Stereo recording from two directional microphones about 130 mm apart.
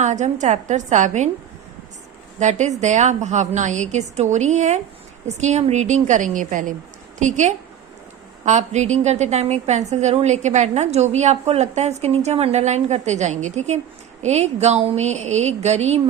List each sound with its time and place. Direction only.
0.0 s a woman's voice: 65° right (ahead or behind)
2.4 s a woman's voice: 65° right (ahead or behind); by 6.7 s 85° right
7.2 s a woman's voice: 70° right (ahead or behind)